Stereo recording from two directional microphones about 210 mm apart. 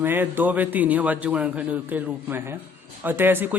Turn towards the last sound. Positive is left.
turn(degrees=-10)  # may be behind; listen again after turning